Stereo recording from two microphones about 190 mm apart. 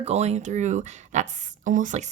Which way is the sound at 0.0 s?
35° right (ahead or behind).